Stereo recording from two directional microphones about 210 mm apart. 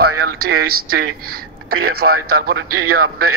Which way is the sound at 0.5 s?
90° right.